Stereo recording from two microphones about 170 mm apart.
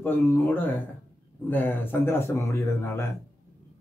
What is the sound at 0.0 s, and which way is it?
A man's voice, 10° left (ahead or behind).